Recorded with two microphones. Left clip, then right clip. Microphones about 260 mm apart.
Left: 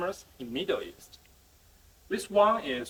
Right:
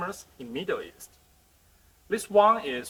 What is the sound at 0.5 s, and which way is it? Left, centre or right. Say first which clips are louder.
Speech: even; centre.